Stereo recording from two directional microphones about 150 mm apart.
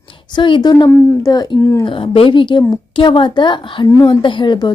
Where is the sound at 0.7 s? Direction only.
20° left (ahead or behind).